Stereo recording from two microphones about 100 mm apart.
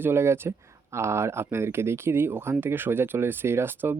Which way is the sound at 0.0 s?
25° right (ahead or behind).